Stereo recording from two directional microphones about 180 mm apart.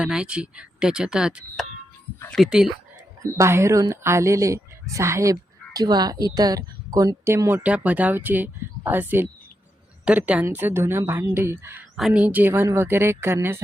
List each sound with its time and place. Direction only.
0.0 s speech: 5° right (ahead or behind)
3.3 s a woman's voice: 15° right (ahead or behind)